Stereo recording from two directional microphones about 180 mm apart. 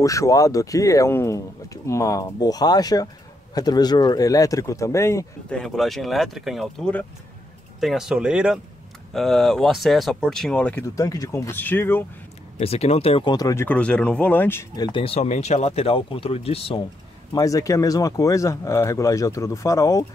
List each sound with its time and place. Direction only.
0.0 s speech: 20° left (ahead or behind)
5.5 s speech: 5° left (ahead or behind)
12.5 s speech: 35° left (ahead or behind); by 14.9 s 15° left (ahead or behind)
14.9 s speech: 30° left (ahead or behind)
17.3 s speech: 20° left (ahead or behind)